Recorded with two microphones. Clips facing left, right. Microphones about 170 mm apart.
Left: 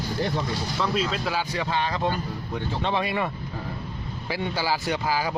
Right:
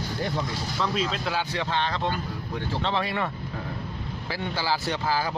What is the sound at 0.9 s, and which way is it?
Speech, 5° left (ahead or behind).